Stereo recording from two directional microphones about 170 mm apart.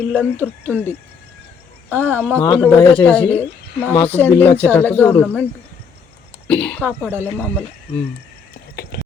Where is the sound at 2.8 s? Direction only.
30° left (ahead or behind).